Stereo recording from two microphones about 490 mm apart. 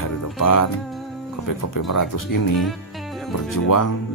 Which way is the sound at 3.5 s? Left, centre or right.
Left.